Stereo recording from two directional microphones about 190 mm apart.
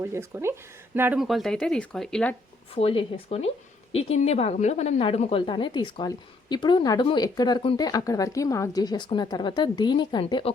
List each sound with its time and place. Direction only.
0.0 s speech: 15° right (ahead or behind); by 2.3 s 5° left (ahead or behind)
2.7 s a woman's voice: 30° left (ahead or behind)